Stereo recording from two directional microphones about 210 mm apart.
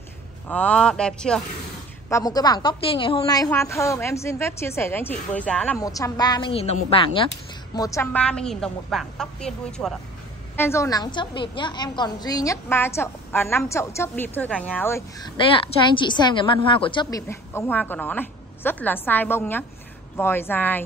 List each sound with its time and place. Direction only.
0.5 s a woman's voice: 5° left (ahead or behind)
2.0 s a woman's voice: 15° left (ahead or behind)
5.8 s a woman's voice: 15° left (ahead or behind)
7.7 s a woman's voice: 15° left (ahead or behind)